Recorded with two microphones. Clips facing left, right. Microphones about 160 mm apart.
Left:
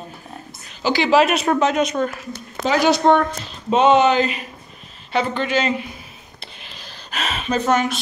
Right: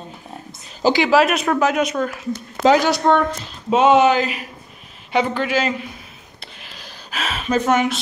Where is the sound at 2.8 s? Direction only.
25° left (ahead or behind).